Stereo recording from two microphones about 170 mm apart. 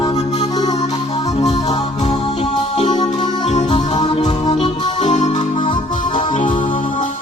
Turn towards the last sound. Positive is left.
turn(degrees=45)  # may be behind; listen again after turning